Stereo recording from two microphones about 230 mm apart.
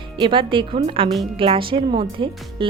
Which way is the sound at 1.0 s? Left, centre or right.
Centre.